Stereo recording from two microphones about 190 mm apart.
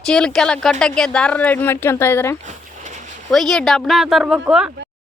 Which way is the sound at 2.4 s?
40° right (ahead or behind).